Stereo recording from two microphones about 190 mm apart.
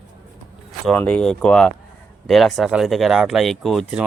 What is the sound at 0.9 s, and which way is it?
Speech, 5° left (ahead or behind).